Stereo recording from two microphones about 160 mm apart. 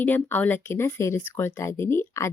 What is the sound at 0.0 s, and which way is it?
Speech, 10° left (ahead or behind).